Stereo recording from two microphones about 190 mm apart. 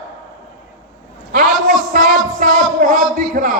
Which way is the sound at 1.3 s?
45° right (ahead or behind).